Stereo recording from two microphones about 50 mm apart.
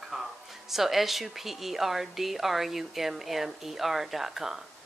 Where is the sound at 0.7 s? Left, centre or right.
Centre.